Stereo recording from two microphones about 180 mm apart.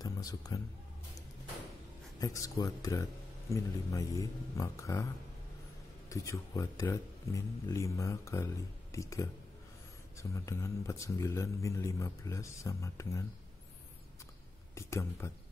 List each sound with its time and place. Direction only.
0.0 s speech: 20° left (ahead or behind)
2.1 s a man's voice: 20° left (ahead or behind)
6.0 s a man's voice: 15° left (ahead or behind)
14.8 s a man's voice: 15° left (ahead or behind)